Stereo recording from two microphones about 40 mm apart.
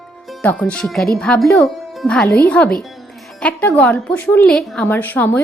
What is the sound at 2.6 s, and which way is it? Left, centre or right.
Speech, left.